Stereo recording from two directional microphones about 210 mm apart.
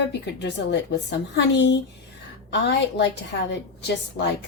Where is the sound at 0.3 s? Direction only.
55° left (ahead or behind).